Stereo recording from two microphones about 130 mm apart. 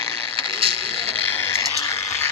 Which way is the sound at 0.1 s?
45° right (ahead or behind).